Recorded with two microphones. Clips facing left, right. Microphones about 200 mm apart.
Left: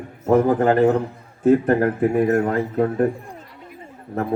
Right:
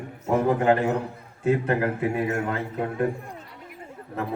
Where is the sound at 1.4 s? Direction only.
45° left (ahead or behind).